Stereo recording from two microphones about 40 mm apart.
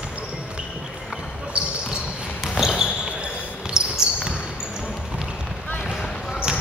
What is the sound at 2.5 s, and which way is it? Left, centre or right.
Basketball bounce, centre.